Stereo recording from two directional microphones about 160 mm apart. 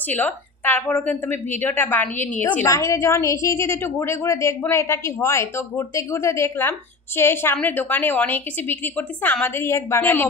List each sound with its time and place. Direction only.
0.1 s a woman's voice: 10° left (ahead or behind)